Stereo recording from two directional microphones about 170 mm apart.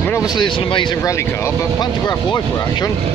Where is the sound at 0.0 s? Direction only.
15° left (ahead or behind).